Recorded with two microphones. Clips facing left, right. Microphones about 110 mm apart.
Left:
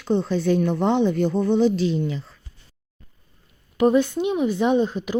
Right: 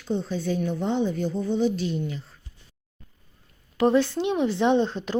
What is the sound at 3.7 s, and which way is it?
Speech, 15° left (ahead or behind).